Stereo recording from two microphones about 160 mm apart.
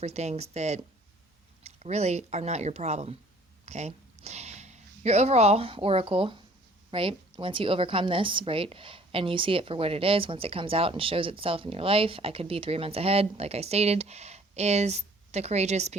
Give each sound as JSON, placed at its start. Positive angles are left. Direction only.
{"t": 0.0, "sound": "a woman's voice", "side_deg": -45}